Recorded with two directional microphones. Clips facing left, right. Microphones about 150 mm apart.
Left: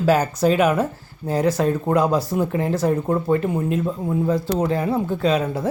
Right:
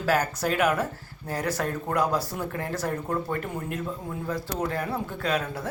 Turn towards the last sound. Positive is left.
turn(degrees=20)  # may be behind; listen again after turning